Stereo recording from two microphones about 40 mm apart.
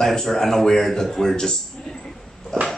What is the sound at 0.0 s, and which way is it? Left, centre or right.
A man's voice, centre.